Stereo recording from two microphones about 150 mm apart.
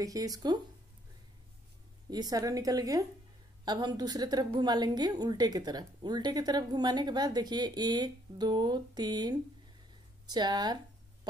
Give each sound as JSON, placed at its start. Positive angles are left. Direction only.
{"t": 0.0, "sound": "a woman's voice", "side_deg": -25}
{"t": 2.0, "sound": "a woman's voice", "side_deg": -25}